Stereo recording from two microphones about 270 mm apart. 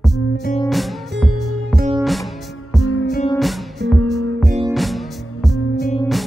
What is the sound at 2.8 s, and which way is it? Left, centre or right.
Music, left.